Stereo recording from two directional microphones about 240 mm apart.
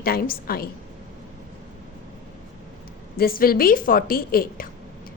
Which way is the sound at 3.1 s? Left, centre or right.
Left.